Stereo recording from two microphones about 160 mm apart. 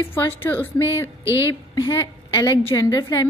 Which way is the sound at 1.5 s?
25° left (ahead or behind).